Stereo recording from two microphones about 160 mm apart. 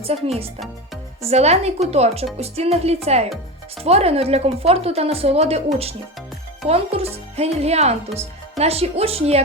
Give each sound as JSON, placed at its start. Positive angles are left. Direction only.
{"t": 0.1, "sound": "speech", "side_deg": -40}